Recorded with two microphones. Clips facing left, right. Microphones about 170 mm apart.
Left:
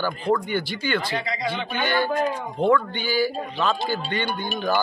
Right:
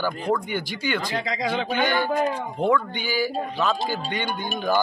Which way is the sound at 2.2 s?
10° right (ahead or behind).